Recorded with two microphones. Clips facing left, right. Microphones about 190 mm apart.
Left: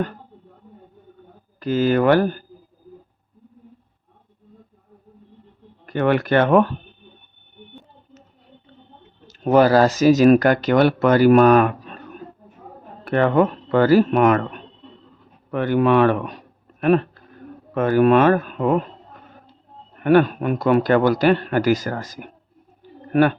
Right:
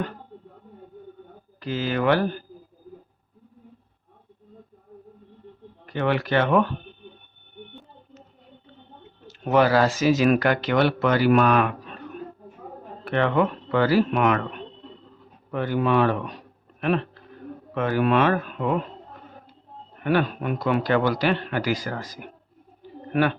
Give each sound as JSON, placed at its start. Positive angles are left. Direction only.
{"t": 1.5, "sound": "speech", "side_deg": 45}
{"t": 5.8, "sound": "speech", "side_deg": 50}
{"t": 9.2, "sound": "speech", "side_deg": 40}
{"t": 13.1, "sound": "speech", "side_deg": 45}
{"t": 15.5, "sound": "speech", "side_deg": 65}
{"t": 16.8, "sound": "a sound", "side_deg": 45}
{"t": 17.7, "sound": "speech", "side_deg": 45}
{"t": 20.0, "sound": "speech", "side_deg": 50}